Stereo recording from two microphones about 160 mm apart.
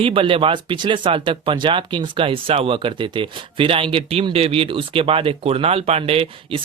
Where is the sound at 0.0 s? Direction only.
35° right (ahead or behind).